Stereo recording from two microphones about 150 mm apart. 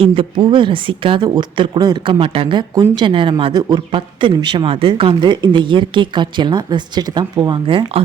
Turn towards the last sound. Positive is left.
turn(degrees=-35)  # may be behind; listen again after turning